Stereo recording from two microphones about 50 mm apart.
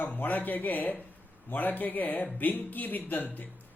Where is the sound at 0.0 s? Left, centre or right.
Left.